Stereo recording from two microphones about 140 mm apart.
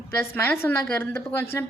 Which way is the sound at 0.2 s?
15° left (ahead or behind).